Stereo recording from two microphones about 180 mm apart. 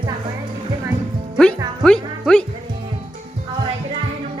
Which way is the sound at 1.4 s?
5° left (ahead or behind).